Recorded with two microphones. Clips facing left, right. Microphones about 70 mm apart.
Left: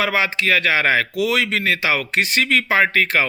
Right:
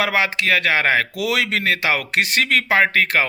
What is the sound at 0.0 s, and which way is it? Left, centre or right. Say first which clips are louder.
A man's voice: even; right.